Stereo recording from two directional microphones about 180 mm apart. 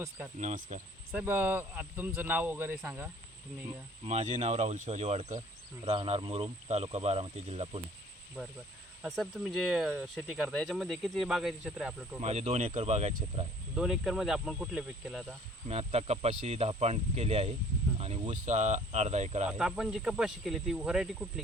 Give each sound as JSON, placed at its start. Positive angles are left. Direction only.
{"t": 0.3, "sound": "speech", "side_deg": -45}
{"t": 1.1, "sound": "speech", "side_deg": -10}
{"t": 4.0, "sound": "speech", "side_deg": -40}
{"t": 9.0, "sound": "speech", "side_deg": 0}
{"t": 12.2, "sound": "speech", "side_deg": -35}
{"t": 13.7, "sound": "speech", "side_deg": 0}
{"t": 15.7, "sound": "speech", "side_deg": -35}
{"t": 19.5, "sound": "speech", "side_deg": -5}